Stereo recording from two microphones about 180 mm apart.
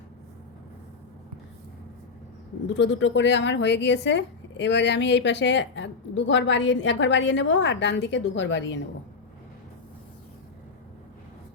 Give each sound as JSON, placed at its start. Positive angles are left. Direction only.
{"t": 2.7, "sound": "speech", "side_deg": 85}